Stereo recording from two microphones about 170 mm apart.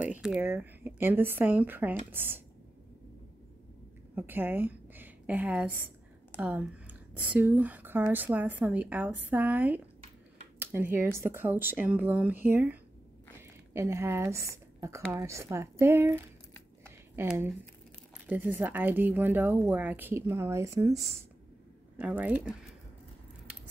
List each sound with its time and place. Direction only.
0.0 s a woman's voice: 5° right (ahead or behind)
4.1 s a woman's voice: 10° right (ahead or behind)
17.3 s speech: 5° right (ahead or behind)
21.9 s speech: 10° right (ahead or behind)